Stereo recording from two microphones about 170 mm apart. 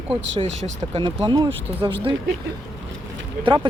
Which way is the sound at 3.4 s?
30° right (ahead or behind).